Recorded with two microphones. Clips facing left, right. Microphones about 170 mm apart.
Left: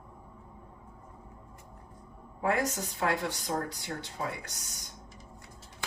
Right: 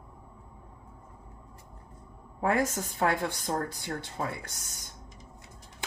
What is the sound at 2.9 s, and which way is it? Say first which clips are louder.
Speech: right 3 dB; 50° right (ahead or behind).